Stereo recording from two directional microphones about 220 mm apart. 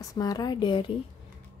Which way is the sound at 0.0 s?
15° left (ahead or behind).